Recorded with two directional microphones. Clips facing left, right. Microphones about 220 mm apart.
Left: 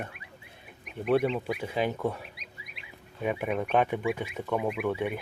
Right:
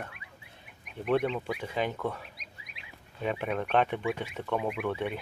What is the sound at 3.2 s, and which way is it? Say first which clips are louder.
Speech: left 2 dB; 10° left (ahead or behind).